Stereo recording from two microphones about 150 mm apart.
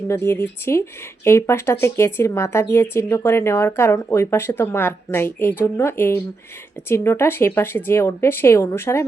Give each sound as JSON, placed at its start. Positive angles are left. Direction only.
{"t": 0.1, "sound": "speech", "side_deg": 15}